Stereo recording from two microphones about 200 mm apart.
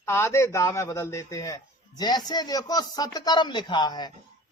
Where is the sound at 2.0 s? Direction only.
20° left (ahead or behind).